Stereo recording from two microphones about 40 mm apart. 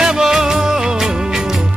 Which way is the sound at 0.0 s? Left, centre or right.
Centre.